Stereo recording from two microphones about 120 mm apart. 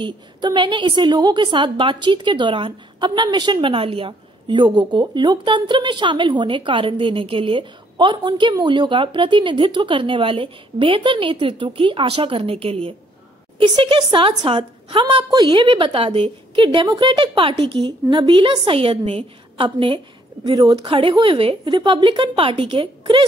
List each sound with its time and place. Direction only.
0.0 s a woman's voice: 40° right (ahead or behind)